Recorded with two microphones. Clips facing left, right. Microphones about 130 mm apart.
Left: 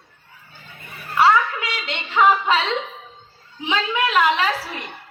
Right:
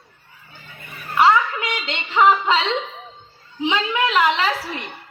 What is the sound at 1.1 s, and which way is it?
A woman's voice, 15° right (ahead or behind).